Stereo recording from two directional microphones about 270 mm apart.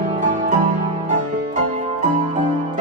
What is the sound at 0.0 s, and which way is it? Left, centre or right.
Music, right.